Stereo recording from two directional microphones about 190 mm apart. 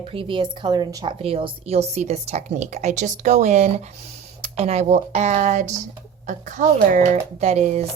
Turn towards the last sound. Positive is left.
turn(degrees=-35)  # may be behind; listen again after turning